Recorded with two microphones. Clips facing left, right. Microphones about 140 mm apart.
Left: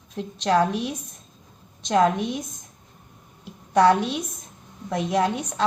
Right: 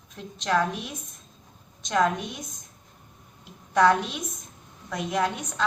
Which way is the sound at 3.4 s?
35° left (ahead or behind).